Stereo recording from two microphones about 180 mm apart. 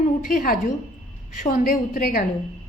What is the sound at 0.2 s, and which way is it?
A woman's voice, 50° left (ahead or behind).